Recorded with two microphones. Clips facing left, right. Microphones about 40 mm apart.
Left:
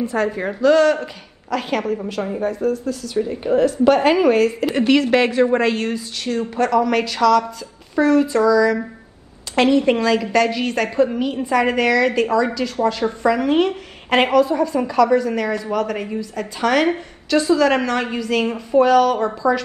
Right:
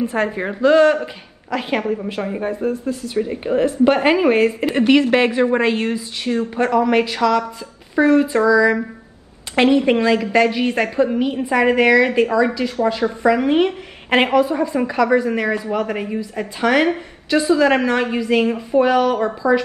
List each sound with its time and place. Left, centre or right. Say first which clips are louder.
0.0 s a woman's voice: even; right
4.7 s a woman's voice: right 1 dB; centre